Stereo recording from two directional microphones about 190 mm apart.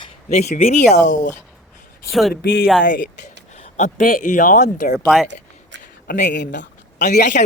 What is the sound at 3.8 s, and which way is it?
Speech, 45° left (ahead or behind).